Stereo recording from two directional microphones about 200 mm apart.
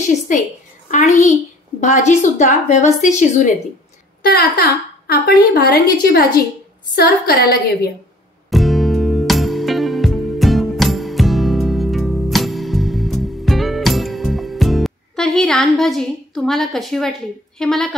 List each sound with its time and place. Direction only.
0.3 s a woman's voice: 40° left (ahead or behind)
4.3 s a woman's voice: 50° left (ahead or behind)
8.5 s music: centre (ahead or behind)
17.6 s a woman's voice: 5° left (ahead or behind)